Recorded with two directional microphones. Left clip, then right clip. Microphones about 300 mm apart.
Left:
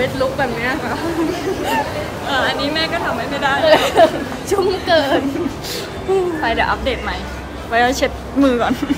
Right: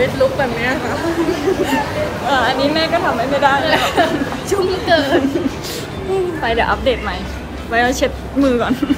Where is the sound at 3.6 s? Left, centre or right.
Left.